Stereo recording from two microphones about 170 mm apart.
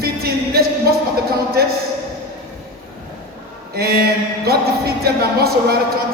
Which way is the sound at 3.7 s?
65° right (ahead or behind).